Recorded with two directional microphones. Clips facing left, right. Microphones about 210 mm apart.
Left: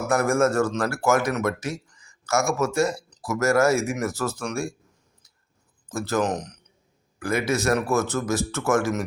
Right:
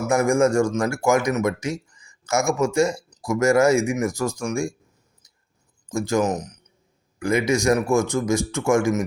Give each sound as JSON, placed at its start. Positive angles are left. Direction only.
{"t": 0.1, "sound": "speech", "side_deg": -15}
{"t": 5.9, "sound": "speech", "side_deg": -15}